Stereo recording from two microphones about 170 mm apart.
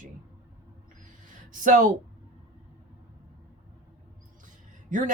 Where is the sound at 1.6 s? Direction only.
50° right (ahead or behind).